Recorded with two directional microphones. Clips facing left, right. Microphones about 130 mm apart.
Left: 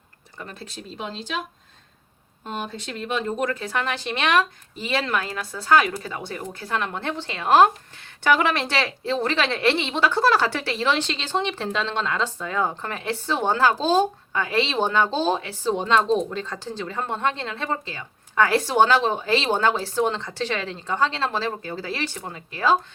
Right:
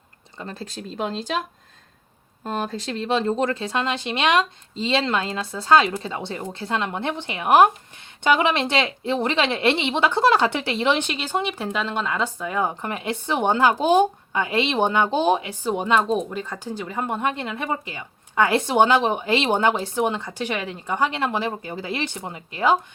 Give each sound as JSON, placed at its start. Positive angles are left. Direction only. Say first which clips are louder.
{"t": 0.3, "sound": "speech", "louder": "right 4 dB", "side_deg": -35}
{"t": 2.4, "sound": "speech", "louder": "right 4 dB", "side_deg": -40}